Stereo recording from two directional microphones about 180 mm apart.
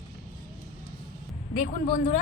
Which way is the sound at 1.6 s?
45° left (ahead or behind).